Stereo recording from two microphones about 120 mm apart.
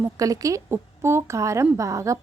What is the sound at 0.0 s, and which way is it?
A woman's voice, 30° right (ahead or behind).